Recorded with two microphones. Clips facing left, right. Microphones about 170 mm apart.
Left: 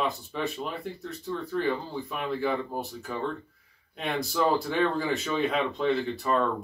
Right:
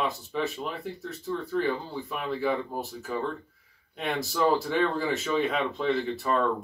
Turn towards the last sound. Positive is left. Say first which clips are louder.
# left 1 dB
turn(degrees=0)  # may be behind; listen again after turning